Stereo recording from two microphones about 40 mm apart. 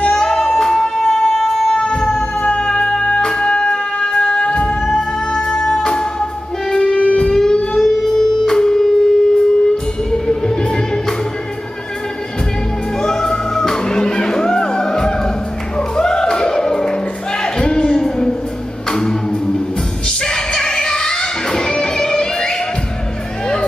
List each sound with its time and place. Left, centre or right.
0.1 s music: centre
1.7 s music: left
7.0 s music: left
7.2 s music: centre
13.0 s music: centre